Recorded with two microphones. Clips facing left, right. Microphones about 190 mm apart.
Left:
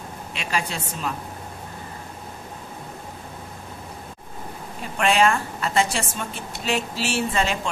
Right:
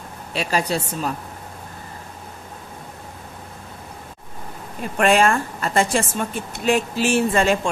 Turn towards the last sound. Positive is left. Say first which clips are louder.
# right 5 dB
turn(degrees=-50)  # may be behind; listen again after turning